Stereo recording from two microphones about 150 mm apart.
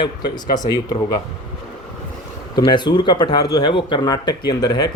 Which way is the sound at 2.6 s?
30° left (ahead or behind).